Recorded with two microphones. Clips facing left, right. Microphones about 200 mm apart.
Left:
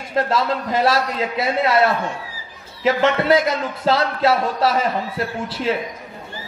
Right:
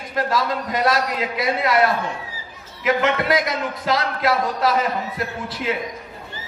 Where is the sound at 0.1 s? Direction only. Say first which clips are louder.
Left 2 dB; 30° left (ahead or behind).